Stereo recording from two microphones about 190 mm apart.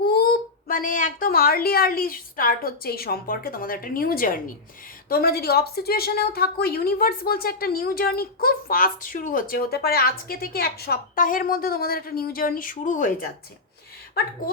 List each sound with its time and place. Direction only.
0.1 s a woman's voice: 55° left (ahead or behind)